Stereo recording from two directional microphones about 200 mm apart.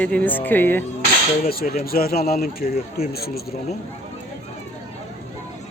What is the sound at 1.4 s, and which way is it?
A man's voice, 45° left (ahead or behind).